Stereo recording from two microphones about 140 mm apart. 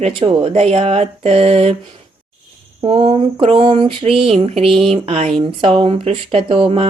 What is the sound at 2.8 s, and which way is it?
Speech, 40° right (ahead or behind).